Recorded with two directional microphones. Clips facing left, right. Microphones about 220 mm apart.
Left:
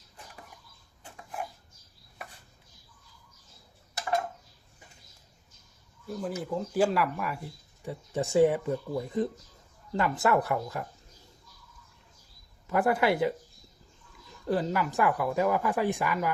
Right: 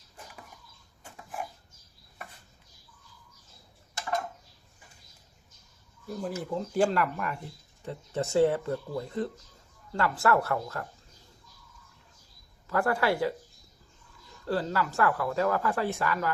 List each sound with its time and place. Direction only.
6.1 s speech: centre (ahead or behind)
12.6 s speech: 15° left (ahead or behind)
14.4 s speech: 15° left (ahead or behind)